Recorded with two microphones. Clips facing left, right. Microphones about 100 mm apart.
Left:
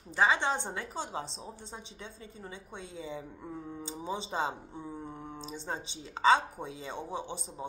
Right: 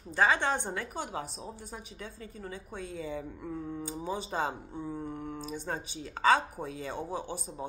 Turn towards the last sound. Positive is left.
turn(degrees=20)  # may be behind; listen again after turning